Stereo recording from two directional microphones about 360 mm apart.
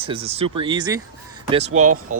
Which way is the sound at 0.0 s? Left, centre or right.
Centre.